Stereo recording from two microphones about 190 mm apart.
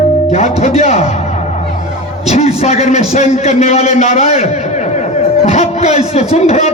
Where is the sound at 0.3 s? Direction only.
35° left (ahead or behind).